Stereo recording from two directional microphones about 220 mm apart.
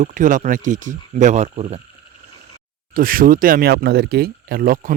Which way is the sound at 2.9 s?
40° right (ahead or behind).